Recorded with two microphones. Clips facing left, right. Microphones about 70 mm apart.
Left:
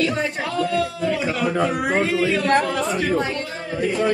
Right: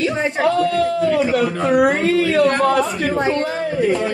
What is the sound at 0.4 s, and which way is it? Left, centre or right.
Speech, right.